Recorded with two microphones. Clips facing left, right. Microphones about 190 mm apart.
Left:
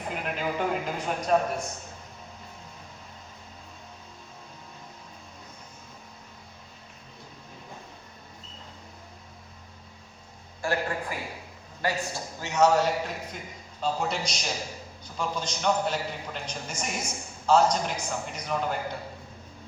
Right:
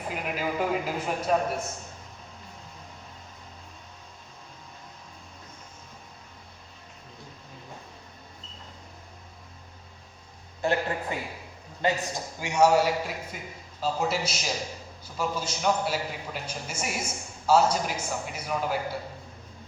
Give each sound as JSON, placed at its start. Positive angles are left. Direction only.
{"t": 0.1, "sound": "a man's voice", "side_deg": -5}
{"t": 10.6, "sound": "a sound", "side_deg": -20}
{"t": 11.8, "sound": "a man's voice", "side_deg": -20}